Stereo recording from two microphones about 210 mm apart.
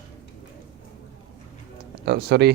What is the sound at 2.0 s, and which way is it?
Speech, 50° right (ahead or behind).